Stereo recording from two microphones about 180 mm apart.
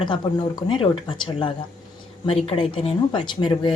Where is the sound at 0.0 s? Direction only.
25° left (ahead or behind).